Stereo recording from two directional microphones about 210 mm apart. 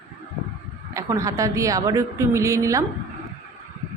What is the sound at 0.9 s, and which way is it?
A woman's voice, 15° right (ahead or behind).